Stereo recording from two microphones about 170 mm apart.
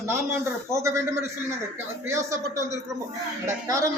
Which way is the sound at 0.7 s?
15° right (ahead or behind).